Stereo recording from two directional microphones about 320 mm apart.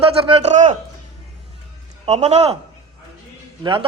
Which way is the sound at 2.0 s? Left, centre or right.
Right.